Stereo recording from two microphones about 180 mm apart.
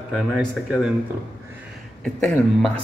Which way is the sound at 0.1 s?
5° right (ahead or behind).